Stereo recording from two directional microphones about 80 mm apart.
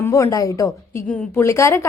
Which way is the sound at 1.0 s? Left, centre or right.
Centre.